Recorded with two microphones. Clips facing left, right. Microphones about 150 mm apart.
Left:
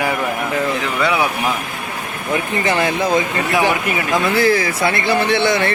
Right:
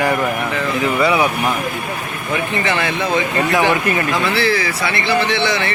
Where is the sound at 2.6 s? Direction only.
40° left (ahead or behind).